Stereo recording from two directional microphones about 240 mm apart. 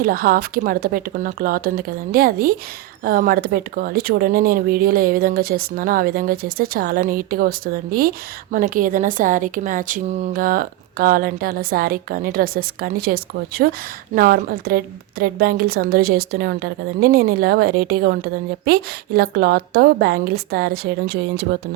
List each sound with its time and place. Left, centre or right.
0.0 s a woman's voice: right